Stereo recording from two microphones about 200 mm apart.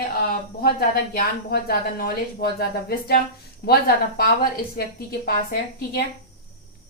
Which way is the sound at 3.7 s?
50° left (ahead or behind).